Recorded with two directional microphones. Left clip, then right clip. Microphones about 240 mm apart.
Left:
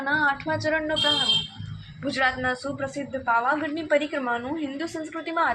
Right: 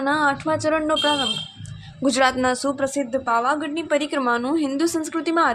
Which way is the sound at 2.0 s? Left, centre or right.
Right.